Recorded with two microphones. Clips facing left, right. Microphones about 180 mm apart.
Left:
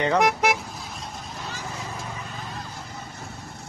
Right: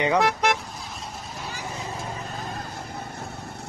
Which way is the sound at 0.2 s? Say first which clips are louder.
Left 1 dB; 10° left (ahead or behind).